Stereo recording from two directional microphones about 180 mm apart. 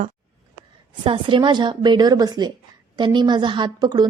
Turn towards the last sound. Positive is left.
turn(degrees=-20)  # may be behind; listen again after turning